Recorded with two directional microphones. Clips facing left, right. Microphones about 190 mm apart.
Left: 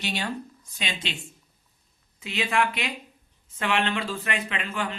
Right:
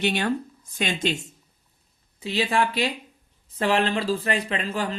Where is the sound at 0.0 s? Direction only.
55° right (ahead or behind).